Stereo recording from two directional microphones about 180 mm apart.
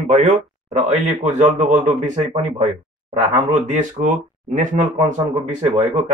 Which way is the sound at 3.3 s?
40° right (ahead or behind).